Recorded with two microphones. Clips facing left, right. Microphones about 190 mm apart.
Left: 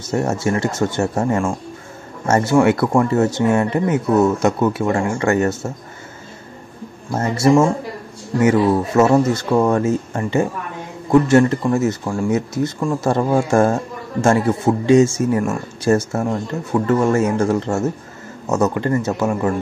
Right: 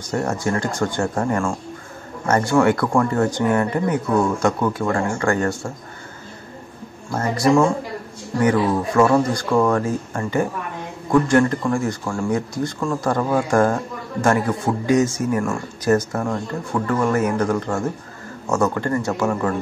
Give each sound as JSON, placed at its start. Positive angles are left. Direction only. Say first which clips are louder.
{"t": 0.1, "sound": "speech", "louder": "left 3 dB", "side_deg": 25}
{"t": 7.1, "sound": "speech", "louder": "left 3 dB", "side_deg": 25}